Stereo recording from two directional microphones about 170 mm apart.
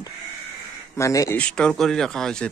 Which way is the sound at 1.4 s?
5° left (ahead or behind).